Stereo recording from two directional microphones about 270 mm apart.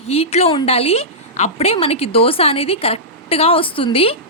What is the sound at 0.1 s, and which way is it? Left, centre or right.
A woman's voice, left.